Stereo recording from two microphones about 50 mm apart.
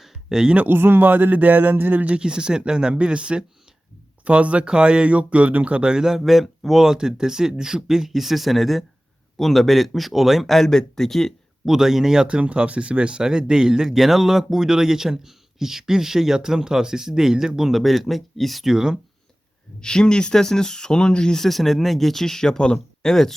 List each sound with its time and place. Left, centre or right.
0.0 s a sound: centre
0.5 s speech: right
2.0 s speech: centre
11.6 s speech: centre
12.4 s speech: right; by 18.9 s centre
19.8 s speech: centre